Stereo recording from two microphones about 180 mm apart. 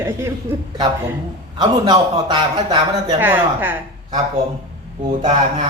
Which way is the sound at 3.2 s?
10° right (ahead or behind).